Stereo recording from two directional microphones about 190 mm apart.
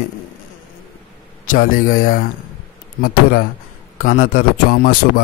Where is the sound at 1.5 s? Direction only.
45° left (ahead or behind).